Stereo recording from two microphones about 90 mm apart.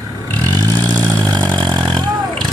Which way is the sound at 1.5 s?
55° right (ahead or behind).